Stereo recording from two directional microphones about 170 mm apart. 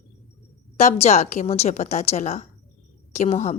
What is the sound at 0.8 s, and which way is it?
A woman's voice, 40° left (ahead or behind).